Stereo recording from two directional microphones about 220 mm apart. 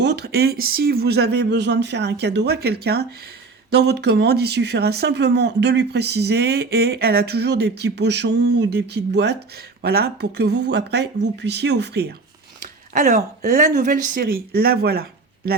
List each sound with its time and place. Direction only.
0.0 s speech: 50° right (ahead or behind)
12.9 s speech: 35° right (ahead or behind)